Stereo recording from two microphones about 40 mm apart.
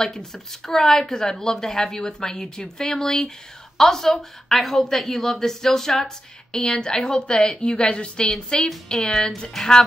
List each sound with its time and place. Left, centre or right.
0.0 s a woman's voice: centre
8.9 s speech: centre